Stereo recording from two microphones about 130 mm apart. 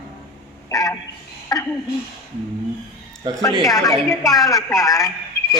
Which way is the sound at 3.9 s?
Centre (ahead or behind).